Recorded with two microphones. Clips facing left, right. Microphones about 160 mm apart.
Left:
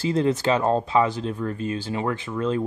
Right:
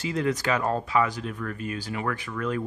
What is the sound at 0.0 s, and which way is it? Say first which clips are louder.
Speech: left 5 dB; 30° left (ahead or behind).